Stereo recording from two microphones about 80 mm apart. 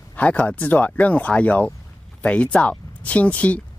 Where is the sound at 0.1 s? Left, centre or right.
Centre.